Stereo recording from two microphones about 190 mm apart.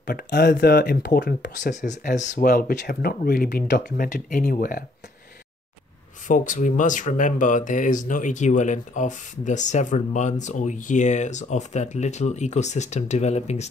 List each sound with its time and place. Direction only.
0.0 s speech: 60° left (ahead or behind)
1.6 s speech: 40° left (ahead or behind)
6.2 s speech: 45° left (ahead or behind)